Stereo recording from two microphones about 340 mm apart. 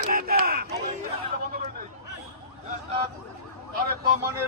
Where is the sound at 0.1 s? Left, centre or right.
Right.